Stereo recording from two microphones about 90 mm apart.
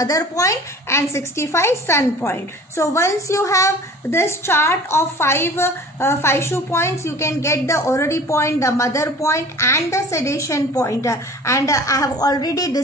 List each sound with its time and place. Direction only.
0.0 s a woman's voice: 40° left (ahead or behind)